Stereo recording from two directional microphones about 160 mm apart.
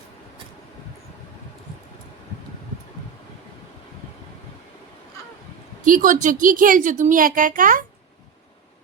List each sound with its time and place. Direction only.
5.8 s speech: 55° right (ahead or behind)